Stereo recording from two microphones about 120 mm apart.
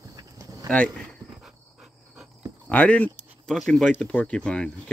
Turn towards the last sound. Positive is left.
turn(degrees=10)  # may be behind; listen again after turning